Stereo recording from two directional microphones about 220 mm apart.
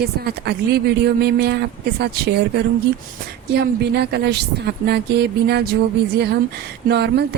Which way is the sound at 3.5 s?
45° right (ahead or behind).